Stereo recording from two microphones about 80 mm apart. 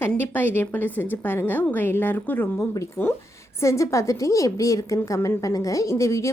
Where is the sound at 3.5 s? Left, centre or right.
Left.